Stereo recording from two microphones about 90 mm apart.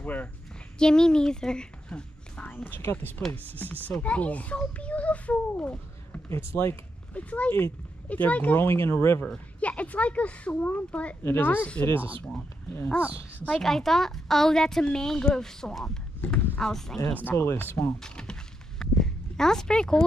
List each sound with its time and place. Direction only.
0.0 s a woman's voice: 20° left (ahead or behind)
4.0 s a child's voice: 15° left (ahead or behind)
6.2 s speech: 25° left (ahead or behind)
7.2 s a child's voice: 15° left (ahead or behind)
8.6 s speech: 25° left (ahead or behind)
9.2 s a child's voice: 15° left (ahead or behind)
13.5 s a woman's voice: 5° left (ahead or behind)
17.1 s speech: 20° left (ahead or behind)
18.0 s a sound: 10° left (ahead or behind)